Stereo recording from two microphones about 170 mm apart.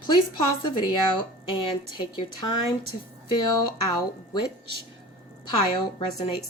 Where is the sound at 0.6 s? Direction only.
25° left (ahead or behind).